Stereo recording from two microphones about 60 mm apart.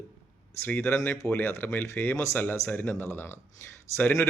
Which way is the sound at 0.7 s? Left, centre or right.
Left.